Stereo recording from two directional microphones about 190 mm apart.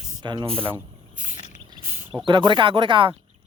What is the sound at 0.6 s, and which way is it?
Snake, 10° right (ahead or behind).